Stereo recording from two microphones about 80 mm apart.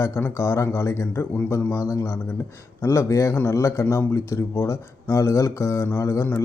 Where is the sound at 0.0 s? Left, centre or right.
Left.